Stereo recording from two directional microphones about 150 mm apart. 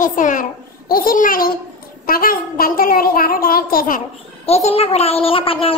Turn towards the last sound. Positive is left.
turn(degrees=40)  # may be behind; listen again after turning